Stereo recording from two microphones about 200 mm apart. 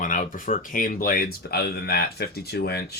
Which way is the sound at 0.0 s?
40° left (ahead or behind).